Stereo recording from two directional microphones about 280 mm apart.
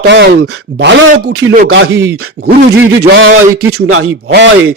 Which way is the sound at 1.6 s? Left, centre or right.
Right.